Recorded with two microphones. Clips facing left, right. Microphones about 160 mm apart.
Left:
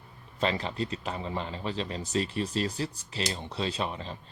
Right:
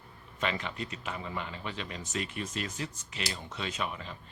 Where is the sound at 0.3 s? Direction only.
35° left (ahead or behind).